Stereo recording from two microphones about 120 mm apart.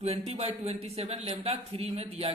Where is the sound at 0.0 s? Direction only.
60° right (ahead or behind).